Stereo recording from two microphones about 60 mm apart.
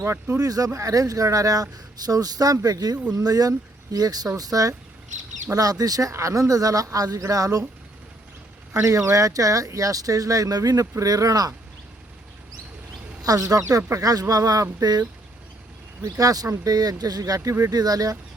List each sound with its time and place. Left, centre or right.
0.3 s speech: right
8.7 s speech: right
13.2 s speech: right
13.9 s speech: right